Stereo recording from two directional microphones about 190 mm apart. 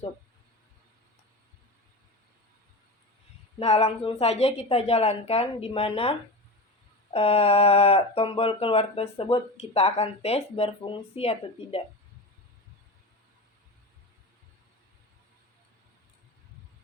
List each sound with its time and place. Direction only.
3.6 s speech: 35° left (ahead or behind)